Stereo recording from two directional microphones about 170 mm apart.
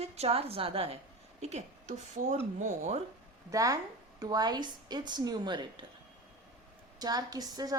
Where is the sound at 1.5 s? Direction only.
45° right (ahead or behind).